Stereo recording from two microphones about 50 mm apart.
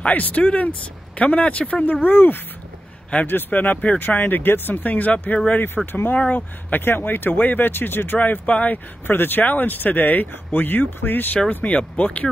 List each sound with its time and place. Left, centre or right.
0.0 s speech: left
2.0 s speech: left
3.5 s speech: left
5.9 s speech: left
8.5 s speech: left
9.0 s speech: left
11.6 s speech: left